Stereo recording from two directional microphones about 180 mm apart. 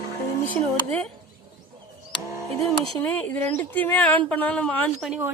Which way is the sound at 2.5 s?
Centre (ahead or behind).